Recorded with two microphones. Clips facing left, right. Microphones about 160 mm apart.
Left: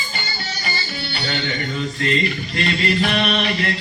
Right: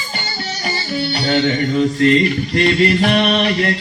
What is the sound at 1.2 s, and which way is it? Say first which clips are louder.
Mantra: right 9 dB; 55° right (ahead or behind).